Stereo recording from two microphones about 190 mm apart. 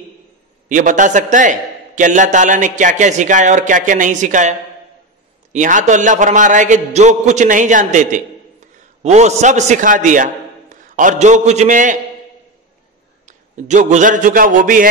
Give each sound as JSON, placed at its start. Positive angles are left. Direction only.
{"t": 0.7, "sound": "a man's voice", "side_deg": -40}
{"t": 13.2, "sound": "a man's voice", "side_deg": -40}